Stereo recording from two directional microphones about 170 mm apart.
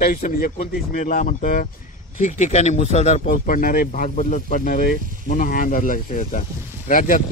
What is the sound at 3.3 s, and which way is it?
Speech, 55° left (ahead or behind).